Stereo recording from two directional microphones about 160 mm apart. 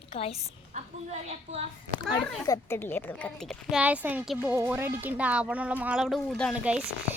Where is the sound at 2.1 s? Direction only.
20° left (ahead or behind); by 3.8 s centre (ahead or behind).